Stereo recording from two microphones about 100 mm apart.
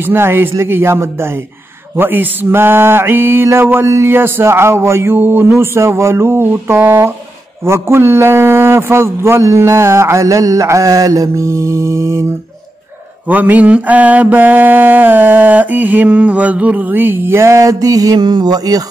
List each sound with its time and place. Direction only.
0.0 s mantra: 25° right (ahead or behind)
13.3 s mantra: 15° right (ahead or behind); by 18.9 s 40° right (ahead or behind)